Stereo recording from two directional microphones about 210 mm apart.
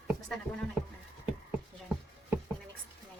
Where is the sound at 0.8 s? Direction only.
5° right (ahead or behind).